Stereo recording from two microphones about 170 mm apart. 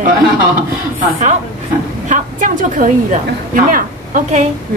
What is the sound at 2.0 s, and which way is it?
A woman's voice, 50° right (ahead or behind).